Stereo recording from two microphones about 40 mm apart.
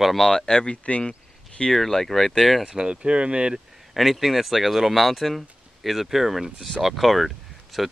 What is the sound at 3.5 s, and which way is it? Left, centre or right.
Speech, centre.